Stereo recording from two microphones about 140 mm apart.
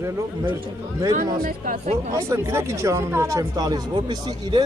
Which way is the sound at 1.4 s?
80° right.